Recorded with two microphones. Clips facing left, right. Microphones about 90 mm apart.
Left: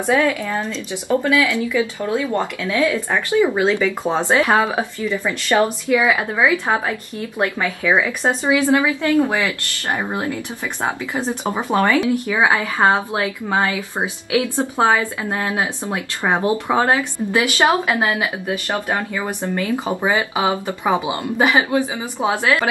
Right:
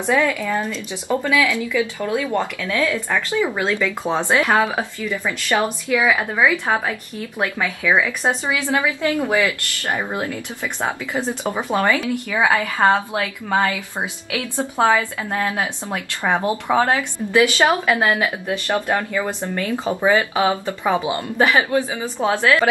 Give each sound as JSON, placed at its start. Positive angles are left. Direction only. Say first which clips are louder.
{"t": 0.0, "sound": "speech", "louder": "left 1 dB", "side_deg": 15}
{"t": 0.6, "sound": "speech", "louder": "even", "side_deg": -10}
{"t": 1.2, "sound": "speech", "louder": "right 1 dB", "side_deg": 20}